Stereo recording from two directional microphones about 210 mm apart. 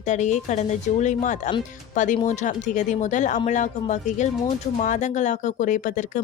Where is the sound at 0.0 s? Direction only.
35° left (ahead or behind).